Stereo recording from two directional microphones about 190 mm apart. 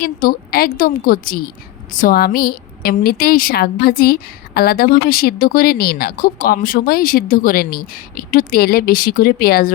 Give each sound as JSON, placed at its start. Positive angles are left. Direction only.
{"t": 0.0, "sound": "a woman's voice", "side_deg": 50}